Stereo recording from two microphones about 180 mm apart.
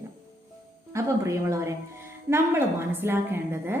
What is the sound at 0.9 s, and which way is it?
A woman's voice, 15° right (ahead or behind).